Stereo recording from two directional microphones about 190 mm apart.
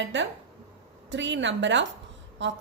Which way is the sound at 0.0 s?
75° right (ahead or behind).